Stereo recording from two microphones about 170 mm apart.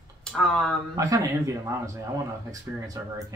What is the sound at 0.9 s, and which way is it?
Speech, 20° right (ahead or behind).